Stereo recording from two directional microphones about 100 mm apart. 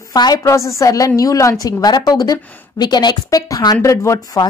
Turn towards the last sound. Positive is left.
turn(degrees=30)  # may be behind; listen again after turning